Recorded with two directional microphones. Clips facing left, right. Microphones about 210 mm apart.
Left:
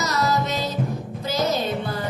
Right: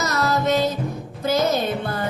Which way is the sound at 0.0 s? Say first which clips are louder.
Right 2 dB; 55° right (ahead or behind).